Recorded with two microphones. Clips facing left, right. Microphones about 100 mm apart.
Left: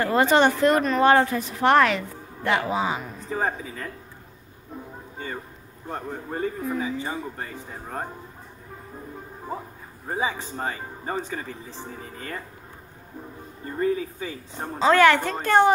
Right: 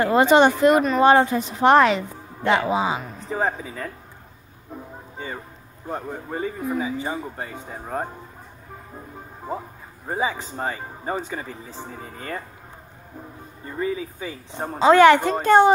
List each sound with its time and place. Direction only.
0.0 s a man's voice: 20° right (ahead or behind)
5.9 s a man's voice: 10° right (ahead or behind)
10.1 s a man's voice: centre (ahead or behind)
10.6 s a man's voice: 15° right (ahead or behind)
13.7 s a man's voice: 5° right (ahead or behind)
14.2 s a woman's voice: 20° right (ahead or behind)